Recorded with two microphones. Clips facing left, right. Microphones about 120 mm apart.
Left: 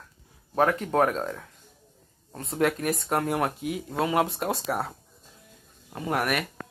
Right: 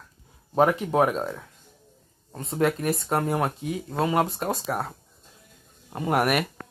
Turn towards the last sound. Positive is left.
turn(degrees=-25)  # may be behind; listen again after turning